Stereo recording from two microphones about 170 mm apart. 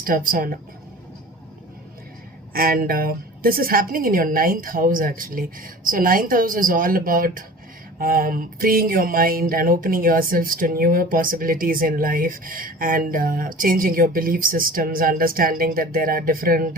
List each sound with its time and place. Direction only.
0.0 s speech: 55° right (ahead or behind)
2.5 s speech: 60° right (ahead or behind)